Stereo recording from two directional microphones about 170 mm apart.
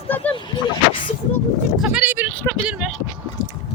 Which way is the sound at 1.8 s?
5° right (ahead or behind).